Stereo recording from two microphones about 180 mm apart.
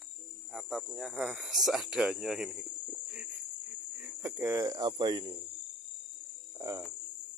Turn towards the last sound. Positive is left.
turn(degrees=-15)  # may be behind; listen again after turning